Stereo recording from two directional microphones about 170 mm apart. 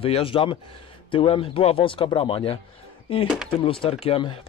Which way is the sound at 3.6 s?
30° left (ahead or behind).